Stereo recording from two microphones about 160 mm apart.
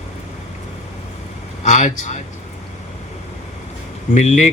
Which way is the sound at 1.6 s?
50° left (ahead or behind).